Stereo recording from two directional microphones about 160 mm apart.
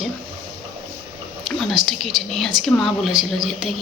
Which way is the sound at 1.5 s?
Centre (ahead or behind).